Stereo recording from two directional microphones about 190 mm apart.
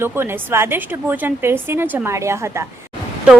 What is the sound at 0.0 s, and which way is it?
A woman's voice, 10° right (ahead or behind).